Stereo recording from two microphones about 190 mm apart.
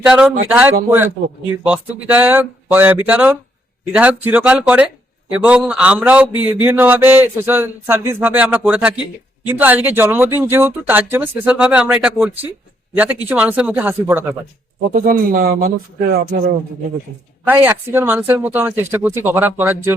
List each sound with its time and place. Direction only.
0.0 s speech: 5° right (ahead or behind)
14.9 s speech: 50° right (ahead or behind)
17.4 s speech: 10° right (ahead or behind)